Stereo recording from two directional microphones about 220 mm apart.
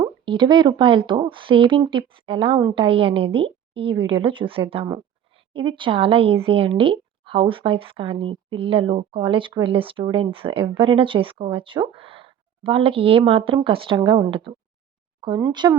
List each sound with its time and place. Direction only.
0.0 s speech: 20° right (ahead or behind)